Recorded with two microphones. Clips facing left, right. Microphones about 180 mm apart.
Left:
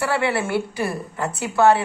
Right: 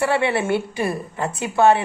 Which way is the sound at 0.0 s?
20° right (ahead or behind).